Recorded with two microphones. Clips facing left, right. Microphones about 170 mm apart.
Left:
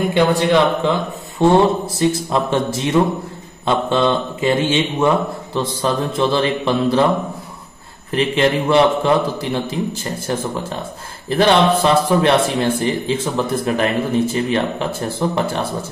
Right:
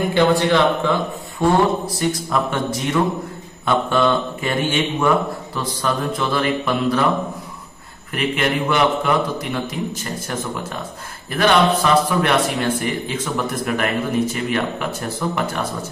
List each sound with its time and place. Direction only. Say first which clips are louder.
0.1 s a man's voice: left 1 dB; 20° left (ahead or behind)
8.1 s a man's voice: left 5 dB; 30° left (ahead or behind)
11.2 s a man's voice: left 2 dB; 30° left (ahead or behind)